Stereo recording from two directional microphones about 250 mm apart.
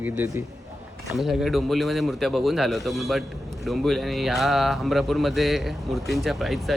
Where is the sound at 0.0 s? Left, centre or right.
Centre.